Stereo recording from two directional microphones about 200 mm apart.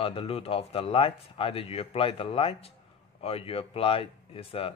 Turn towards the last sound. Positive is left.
turn(degrees=30)  # may be behind; listen again after turning